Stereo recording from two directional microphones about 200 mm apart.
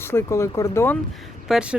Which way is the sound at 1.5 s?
5° right (ahead or behind).